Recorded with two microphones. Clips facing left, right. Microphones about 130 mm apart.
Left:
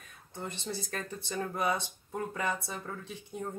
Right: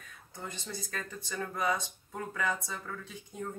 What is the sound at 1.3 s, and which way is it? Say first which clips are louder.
Speech: left 1 dB; 30° left (ahead or behind).